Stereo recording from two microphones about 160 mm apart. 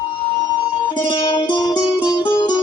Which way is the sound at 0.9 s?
30° left (ahead or behind).